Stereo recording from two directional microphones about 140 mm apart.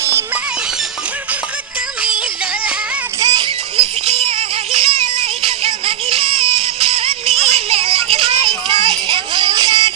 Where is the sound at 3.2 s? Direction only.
30° right (ahead or behind).